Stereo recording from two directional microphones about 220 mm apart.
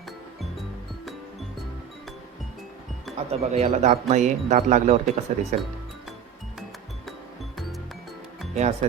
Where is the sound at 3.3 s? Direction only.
30° right (ahead or behind).